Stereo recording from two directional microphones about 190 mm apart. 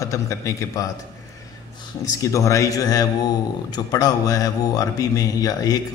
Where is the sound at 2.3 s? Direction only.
15° left (ahead or behind).